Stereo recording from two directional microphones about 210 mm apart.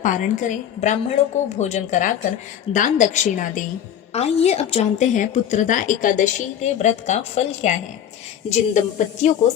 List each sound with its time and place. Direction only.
0.0 s a woman's voice: 35° left (ahead or behind)